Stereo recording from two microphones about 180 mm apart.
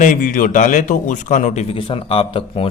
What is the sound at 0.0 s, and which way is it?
A man's voice, 45° left (ahead or behind).